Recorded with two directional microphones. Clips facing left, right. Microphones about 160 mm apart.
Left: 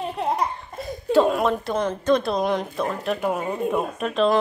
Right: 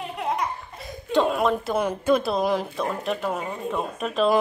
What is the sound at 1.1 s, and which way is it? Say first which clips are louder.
A woman's voice: left 2 dB; centre (ahead or behind).